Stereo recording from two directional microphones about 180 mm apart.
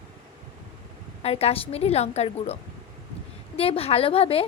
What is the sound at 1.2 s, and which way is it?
A woman's voice, 35° left (ahead or behind).